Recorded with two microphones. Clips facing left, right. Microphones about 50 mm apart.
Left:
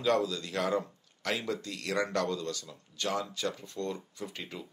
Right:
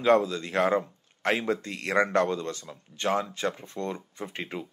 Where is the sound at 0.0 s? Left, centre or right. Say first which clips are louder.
Right 6 dB; right.